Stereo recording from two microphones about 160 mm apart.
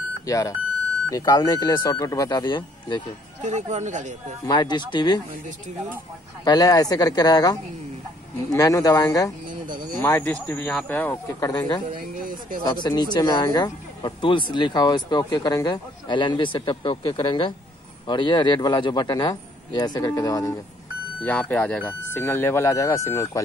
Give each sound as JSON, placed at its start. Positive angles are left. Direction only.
{"t": 0.3, "sound": "speech", "side_deg": 20}
{"t": 3.4, "sound": "speech", "side_deg": -45}
{"t": 4.5, "sound": "speech", "side_deg": 25}
{"t": 6.4, "sound": "speech", "side_deg": 25}
{"t": 9.5, "sound": "a sound", "side_deg": -55}
{"t": 10.0, "sound": "speech", "side_deg": 10}
{"t": 11.9, "sound": "speech", "side_deg": -60}
{"t": 12.8, "sound": "speech", "side_deg": 25}
{"t": 21.2, "sound": "speech", "side_deg": 10}